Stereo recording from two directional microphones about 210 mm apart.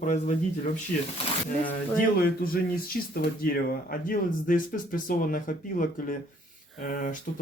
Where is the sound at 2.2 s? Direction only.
45° left (ahead or behind).